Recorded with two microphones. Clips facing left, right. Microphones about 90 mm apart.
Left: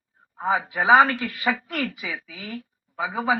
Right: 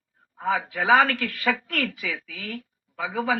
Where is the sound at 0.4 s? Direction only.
20° left (ahead or behind).